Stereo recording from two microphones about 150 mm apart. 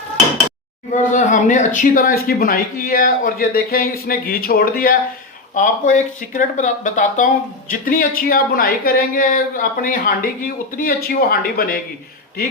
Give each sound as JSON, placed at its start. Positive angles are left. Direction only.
{"t": 0.9, "sound": "speech", "side_deg": 55}
{"t": 5.5, "sound": "speech", "side_deg": 60}
{"t": 7.7, "sound": "speech", "side_deg": 70}